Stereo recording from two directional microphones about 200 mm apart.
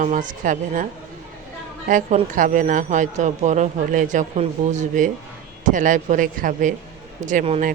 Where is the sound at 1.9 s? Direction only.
40° right (ahead or behind).